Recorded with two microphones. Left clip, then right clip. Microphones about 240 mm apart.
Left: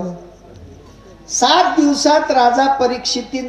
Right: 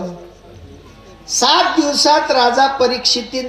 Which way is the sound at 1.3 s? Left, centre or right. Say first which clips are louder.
Even; right.